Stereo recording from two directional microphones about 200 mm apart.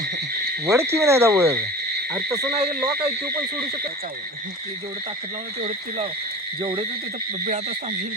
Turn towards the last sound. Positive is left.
turn(degrees=-25)  # may be behind; listen again after turning